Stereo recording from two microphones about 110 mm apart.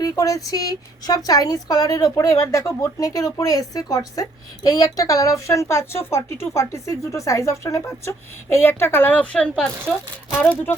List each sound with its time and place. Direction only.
0.0 s speech: 30° left (ahead or behind); by 9.6 s 10° left (ahead or behind)